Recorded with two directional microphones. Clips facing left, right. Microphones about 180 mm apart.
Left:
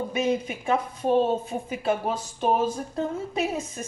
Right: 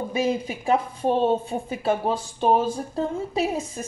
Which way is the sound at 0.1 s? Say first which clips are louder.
Right 2 dB; 30° right (ahead or behind).